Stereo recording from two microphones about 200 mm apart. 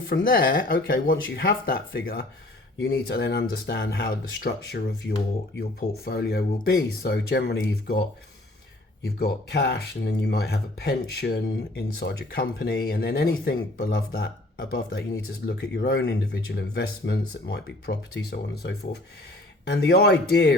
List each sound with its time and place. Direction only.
0.1 s speech: 50° left (ahead or behind)
6.1 s speech: 50° left (ahead or behind)
9.0 s speech: 50° left (ahead or behind)